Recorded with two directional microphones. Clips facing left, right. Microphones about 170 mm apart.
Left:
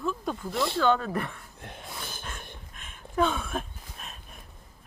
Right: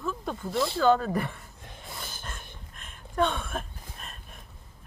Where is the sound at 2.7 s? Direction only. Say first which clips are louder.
Left 1 dB; centre (ahead or behind).